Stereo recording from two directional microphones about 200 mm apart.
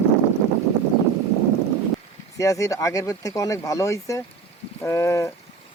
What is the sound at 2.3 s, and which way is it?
Speech, 15° left (ahead or behind).